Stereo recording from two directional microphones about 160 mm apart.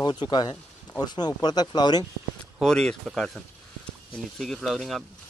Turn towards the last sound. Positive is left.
turn(degrees=0)  # may be behind; listen again after turning